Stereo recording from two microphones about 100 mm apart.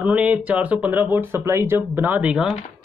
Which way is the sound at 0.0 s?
15° right (ahead or behind).